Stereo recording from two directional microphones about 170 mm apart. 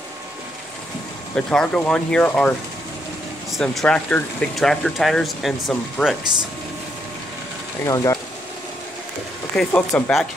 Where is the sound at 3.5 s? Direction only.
5° left (ahead or behind).